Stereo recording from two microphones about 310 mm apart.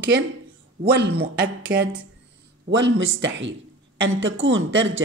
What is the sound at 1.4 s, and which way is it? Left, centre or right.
A woman's voice, right.